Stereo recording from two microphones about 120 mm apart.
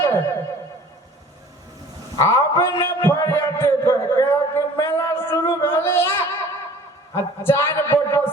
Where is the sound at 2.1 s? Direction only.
25° left (ahead or behind).